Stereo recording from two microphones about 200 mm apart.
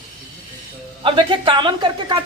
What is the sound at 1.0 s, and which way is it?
A woman's voice, 25° right (ahead or behind).